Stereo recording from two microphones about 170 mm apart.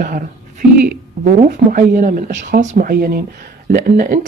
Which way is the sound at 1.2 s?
55° right (ahead or behind).